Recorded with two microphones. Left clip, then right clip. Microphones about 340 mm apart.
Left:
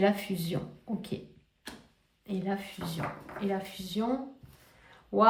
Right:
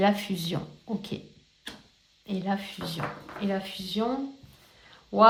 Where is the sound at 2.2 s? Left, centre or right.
Centre.